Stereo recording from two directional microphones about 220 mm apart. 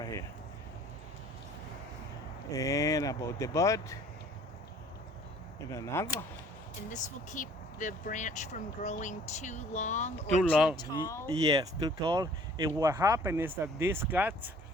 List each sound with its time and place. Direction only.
2.5 s speech: 15° left (ahead or behind)
5.7 s speech: 10° left (ahead or behind)
6.9 s speech: 35° left (ahead or behind)
10.5 s speech: 5° right (ahead or behind)
10.8 s speech: 20° left (ahead or behind)
11.3 s speech: 15° right (ahead or behind)